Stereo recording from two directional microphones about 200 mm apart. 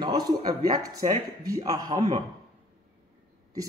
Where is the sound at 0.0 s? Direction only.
20° right (ahead or behind).